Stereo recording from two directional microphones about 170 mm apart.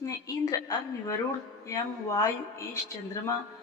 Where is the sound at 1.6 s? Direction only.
20° left (ahead or behind).